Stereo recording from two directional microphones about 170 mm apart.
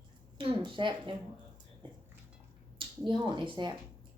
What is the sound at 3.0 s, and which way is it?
Speech, 25° right (ahead or behind).